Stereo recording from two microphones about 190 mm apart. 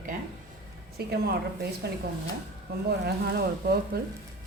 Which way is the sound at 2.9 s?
60° right (ahead or behind).